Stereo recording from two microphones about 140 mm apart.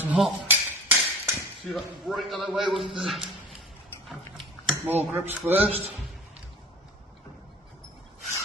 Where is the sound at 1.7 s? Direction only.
Centre (ahead or behind).